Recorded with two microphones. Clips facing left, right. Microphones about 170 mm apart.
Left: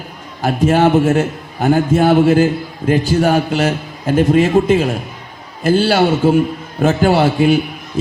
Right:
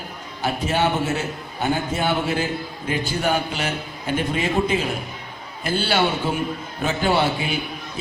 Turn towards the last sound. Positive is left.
turn(degrees=45)  # may be behind; listen again after turning